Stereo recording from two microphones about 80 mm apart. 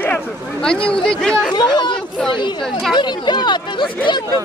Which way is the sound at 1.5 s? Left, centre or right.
Left.